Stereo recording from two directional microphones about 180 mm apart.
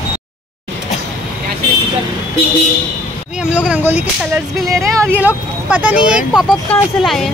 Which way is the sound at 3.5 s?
5° right (ahead or behind).